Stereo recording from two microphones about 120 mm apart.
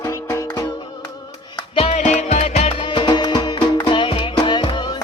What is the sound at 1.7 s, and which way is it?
Music, 50° left (ahead or behind).